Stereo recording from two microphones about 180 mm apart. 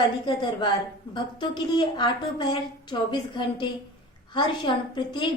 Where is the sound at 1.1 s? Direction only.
25° left (ahead or behind).